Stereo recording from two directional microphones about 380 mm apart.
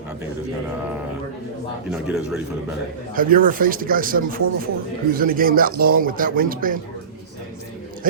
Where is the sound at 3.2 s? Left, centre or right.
Right.